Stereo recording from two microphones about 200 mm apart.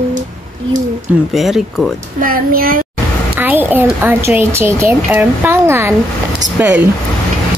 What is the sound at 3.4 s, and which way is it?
Speech, 10° right (ahead or behind).